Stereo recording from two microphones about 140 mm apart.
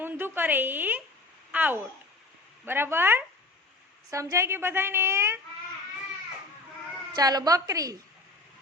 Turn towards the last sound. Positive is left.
turn(degrees=-25)  # may be behind; listen again after turning